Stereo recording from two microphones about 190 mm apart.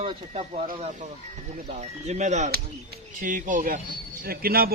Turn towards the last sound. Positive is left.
turn(degrees=-50)  # may be behind; listen again after turning